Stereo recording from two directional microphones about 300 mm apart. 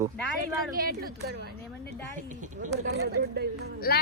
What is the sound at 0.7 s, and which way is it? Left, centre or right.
A woman's voice, right.